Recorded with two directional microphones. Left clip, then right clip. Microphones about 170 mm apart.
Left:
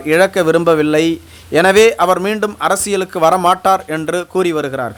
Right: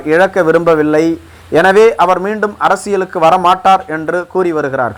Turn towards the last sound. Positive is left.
turn(degrees=20)  # may be behind; listen again after turning